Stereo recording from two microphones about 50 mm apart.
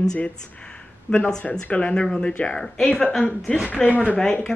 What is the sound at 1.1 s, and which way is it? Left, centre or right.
Speech, left.